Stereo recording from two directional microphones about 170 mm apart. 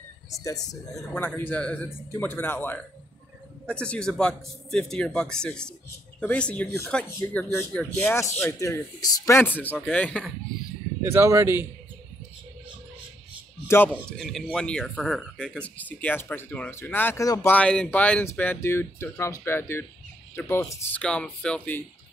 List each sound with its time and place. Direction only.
0.3 s speech: 20° left (ahead or behind)
1.1 s speech: 10° left (ahead or behind)
11.1 s a man's voice: 15° right (ahead or behind)
14.1 s speech: centre (ahead or behind)